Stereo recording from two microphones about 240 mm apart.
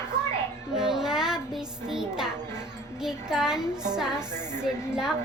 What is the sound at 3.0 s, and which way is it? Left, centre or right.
A woman's voice, centre.